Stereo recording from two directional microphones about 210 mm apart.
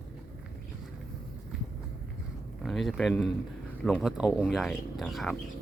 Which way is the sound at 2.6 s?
Centre (ahead or behind).